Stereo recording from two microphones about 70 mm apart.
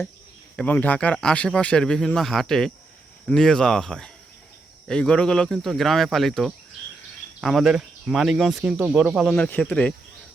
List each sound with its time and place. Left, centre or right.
0.5 s speech: left; by 6.5 s centre
7.4 s speech: centre
8.6 s speech: centre
9.0 s speech: centre
9.5 s speech: left